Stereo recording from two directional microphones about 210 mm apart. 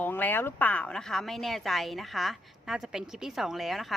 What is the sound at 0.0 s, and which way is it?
A woman's voice, 10° left (ahead or behind).